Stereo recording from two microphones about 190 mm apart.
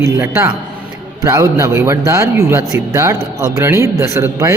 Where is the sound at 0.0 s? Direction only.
15° right (ahead or behind).